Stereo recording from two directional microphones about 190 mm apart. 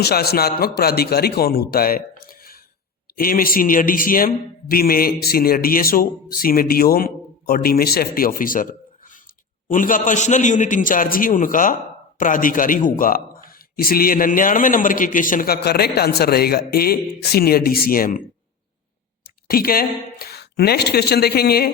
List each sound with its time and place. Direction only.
0.0 s a man's voice: 55° left (ahead or behind)
19.5 s a woman's voice: 50° left (ahead or behind)